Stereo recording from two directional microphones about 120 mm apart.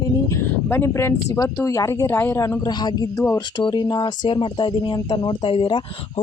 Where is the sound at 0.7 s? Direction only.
20° left (ahead or behind).